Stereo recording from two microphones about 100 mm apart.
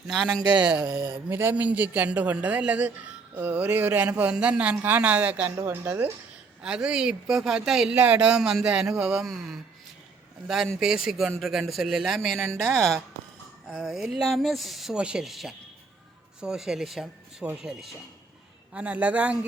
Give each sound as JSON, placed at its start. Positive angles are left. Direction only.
{"t": 0.1, "sound": "speech", "side_deg": 0}
{"t": 0.5, "sound": "speech", "side_deg": -10}
{"t": 1.3, "sound": "a woman's voice", "side_deg": -20}
{"t": 6.6, "sound": "speech", "side_deg": -10}